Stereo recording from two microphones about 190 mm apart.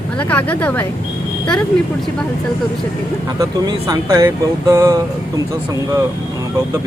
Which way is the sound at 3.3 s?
20° right (ahead or behind).